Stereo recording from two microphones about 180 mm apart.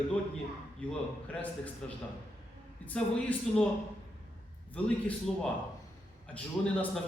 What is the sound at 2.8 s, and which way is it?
Speech, 5° left (ahead or behind).